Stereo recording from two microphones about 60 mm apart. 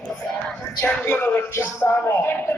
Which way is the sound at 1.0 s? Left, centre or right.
Left.